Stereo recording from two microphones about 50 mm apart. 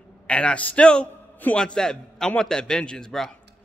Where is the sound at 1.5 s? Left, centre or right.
Centre.